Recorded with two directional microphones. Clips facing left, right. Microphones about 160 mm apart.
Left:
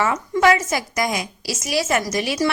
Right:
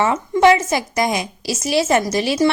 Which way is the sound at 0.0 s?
25° right (ahead or behind).